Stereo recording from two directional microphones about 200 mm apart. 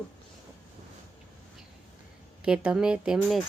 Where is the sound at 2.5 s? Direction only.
5° right (ahead or behind).